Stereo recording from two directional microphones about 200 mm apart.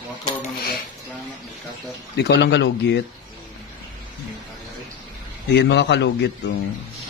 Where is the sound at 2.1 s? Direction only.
55° left (ahead or behind).